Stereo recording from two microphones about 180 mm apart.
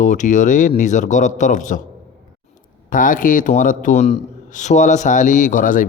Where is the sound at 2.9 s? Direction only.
50° left (ahead or behind).